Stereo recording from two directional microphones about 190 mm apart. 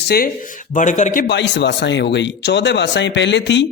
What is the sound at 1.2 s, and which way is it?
A man's voice, 65° left (ahead or behind).